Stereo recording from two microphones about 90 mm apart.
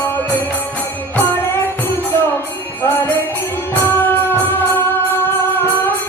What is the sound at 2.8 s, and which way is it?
Music, 25° left (ahead or behind).